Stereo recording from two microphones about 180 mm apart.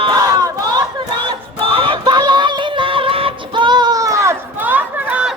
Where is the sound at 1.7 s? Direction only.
30° right (ahead or behind).